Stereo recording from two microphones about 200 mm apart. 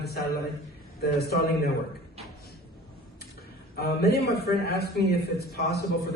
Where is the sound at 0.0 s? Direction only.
55° left (ahead or behind).